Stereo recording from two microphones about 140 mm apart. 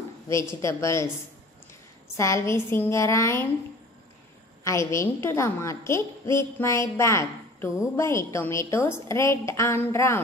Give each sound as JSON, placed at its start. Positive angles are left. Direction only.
{"t": 0.6, "sound": "a woman's voice", "side_deg": 20}
{"t": 2.1, "sound": "a woman's voice", "side_deg": 20}
{"t": 4.6, "sound": "a woman's voice", "side_deg": 20}